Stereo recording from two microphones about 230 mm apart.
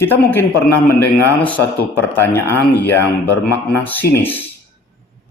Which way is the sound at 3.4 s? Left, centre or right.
Centre.